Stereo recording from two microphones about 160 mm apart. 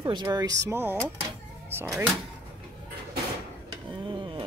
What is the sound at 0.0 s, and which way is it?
Speech, 25° right (ahead or behind).